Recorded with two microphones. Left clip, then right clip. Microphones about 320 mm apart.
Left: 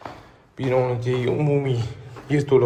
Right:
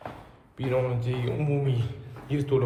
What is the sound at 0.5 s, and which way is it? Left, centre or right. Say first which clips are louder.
A man's voice: left 6 dB; centre.